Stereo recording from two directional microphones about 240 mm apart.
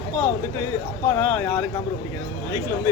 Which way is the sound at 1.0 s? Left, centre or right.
Centre.